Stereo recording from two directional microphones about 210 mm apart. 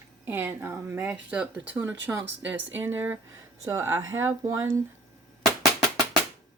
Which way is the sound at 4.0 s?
70° right (ahead or behind).